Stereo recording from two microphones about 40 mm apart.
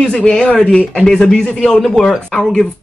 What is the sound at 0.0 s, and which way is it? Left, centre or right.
Speech, centre.